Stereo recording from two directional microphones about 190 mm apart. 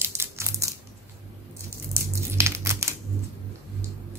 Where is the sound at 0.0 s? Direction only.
15° right (ahead or behind).